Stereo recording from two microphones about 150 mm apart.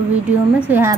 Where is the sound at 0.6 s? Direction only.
15° right (ahead or behind).